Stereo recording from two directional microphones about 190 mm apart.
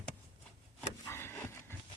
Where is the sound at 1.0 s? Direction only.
15° left (ahead or behind).